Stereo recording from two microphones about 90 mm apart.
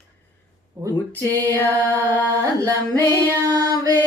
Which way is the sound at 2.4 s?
40° right (ahead or behind).